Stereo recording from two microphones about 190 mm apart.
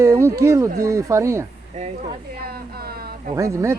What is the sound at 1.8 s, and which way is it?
Speech, 40° right (ahead or behind).